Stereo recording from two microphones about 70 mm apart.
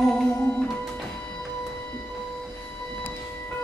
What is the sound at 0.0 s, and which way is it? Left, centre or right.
Music, centre.